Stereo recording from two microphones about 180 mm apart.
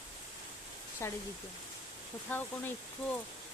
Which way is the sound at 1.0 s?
15° left (ahead or behind).